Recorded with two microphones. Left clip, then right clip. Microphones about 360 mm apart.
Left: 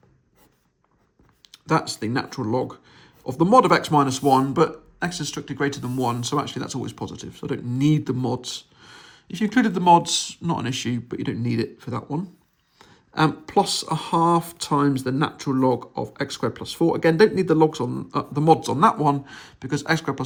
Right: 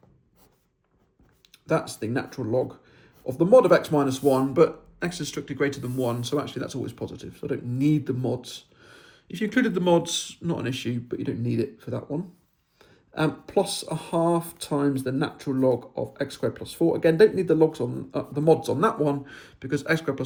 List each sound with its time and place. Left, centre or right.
1.5 s speech: centre